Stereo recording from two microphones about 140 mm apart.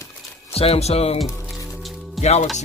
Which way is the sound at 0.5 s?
45° left (ahead or behind).